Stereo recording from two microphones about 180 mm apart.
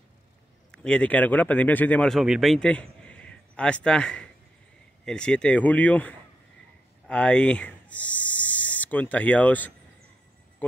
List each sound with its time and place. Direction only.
0.8 s speech: 5° left (ahead or behind)